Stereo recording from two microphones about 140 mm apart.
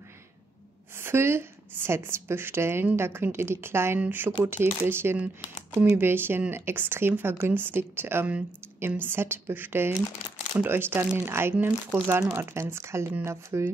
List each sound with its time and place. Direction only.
0.9 s speech: 15° right (ahead or behind)